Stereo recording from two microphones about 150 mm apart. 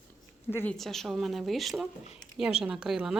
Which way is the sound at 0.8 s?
Centre (ahead or behind).